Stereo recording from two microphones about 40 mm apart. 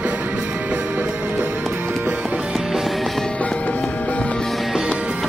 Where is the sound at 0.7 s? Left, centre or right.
Right.